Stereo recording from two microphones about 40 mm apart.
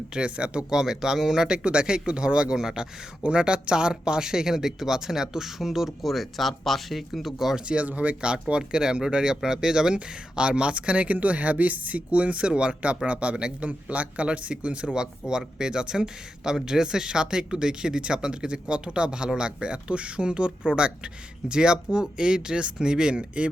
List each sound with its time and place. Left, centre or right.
0.1 s speech: right
0.7 s speech: centre
2.6 s speech: centre
3.2 s speech: right; by 7.6 s centre
7.9 s a man's voice: right
8.2 s a man's voice: right